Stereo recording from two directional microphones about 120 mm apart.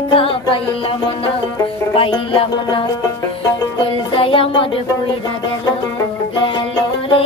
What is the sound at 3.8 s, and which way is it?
Music, 50° left (ahead or behind).